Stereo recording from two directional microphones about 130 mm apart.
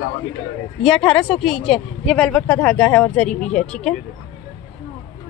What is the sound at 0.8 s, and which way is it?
A woman's voice, 5° left (ahead or behind).